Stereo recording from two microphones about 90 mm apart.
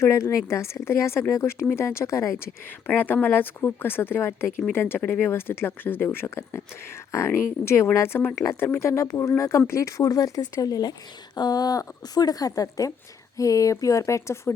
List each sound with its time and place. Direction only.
0.0 s speech: 35° left (ahead or behind)